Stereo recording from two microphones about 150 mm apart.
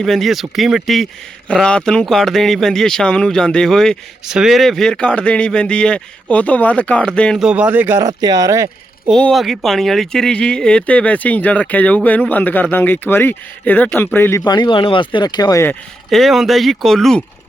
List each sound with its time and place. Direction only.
0.0 s speech: centre (ahead or behind)
8.0 s speech: 25° right (ahead or behind)
9.0 s speech: centre (ahead or behind)
14.4 s speech: 30° left (ahead or behind)
16.0 s speech: centre (ahead or behind)